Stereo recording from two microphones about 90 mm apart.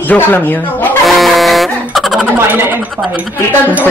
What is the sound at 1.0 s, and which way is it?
Music, centre (ahead or behind).